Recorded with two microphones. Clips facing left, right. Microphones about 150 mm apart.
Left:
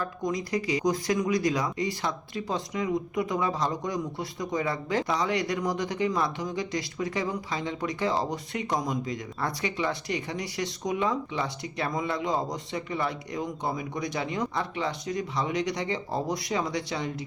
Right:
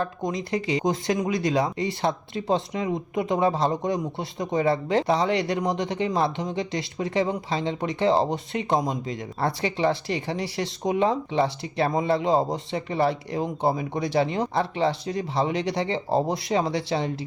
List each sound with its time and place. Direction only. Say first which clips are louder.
0.0 s speech: right 2 dB; 25° right (ahead or behind)